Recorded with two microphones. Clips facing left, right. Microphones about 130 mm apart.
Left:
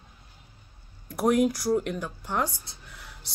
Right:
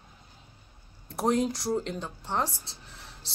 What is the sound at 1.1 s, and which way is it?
Speech, 25° right (ahead or behind).